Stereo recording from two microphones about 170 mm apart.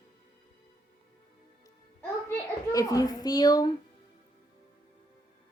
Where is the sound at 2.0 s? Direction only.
15° left (ahead or behind).